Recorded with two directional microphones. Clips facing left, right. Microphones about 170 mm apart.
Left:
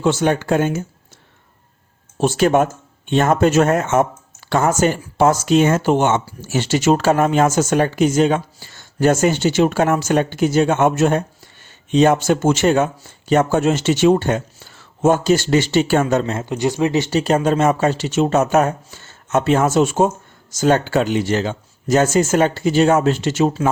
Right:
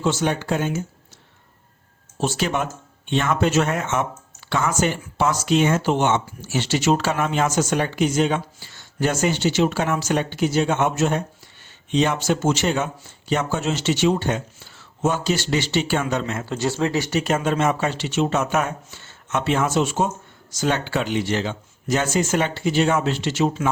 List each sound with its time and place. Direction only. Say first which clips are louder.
0.0 s speech: left 5 dB; 55° left (ahead or behind)
2.1 s speech: left 8 dB; 55° left (ahead or behind)
16.3 s speech: left 4 dB; 20° left (ahead or behind)
17.1 s speech: left 5 dB; 35° left (ahead or behind)